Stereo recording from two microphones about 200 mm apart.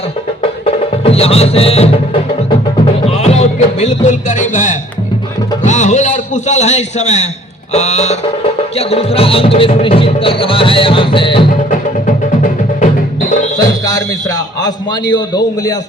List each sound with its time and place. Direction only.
0.6 s music: 30° left (ahead or behind)
3.1 s music: 30° left (ahead or behind)
5.6 s a man's voice: 35° left (ahead or behind)
8.7 s music: 30° left (ahead or behind)
12.0 s music: 40° left (ahead or behind)
13.8 s music: 20° left (ahead or behind)